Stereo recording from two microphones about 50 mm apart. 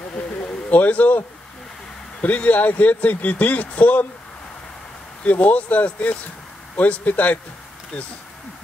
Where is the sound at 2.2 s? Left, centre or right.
Left.